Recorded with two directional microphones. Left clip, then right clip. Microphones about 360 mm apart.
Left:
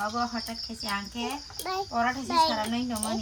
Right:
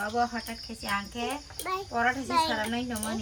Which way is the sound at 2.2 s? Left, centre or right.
Left.